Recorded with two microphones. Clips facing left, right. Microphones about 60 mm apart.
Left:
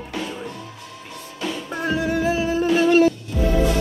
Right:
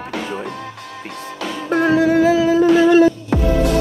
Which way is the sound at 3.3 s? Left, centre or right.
Right.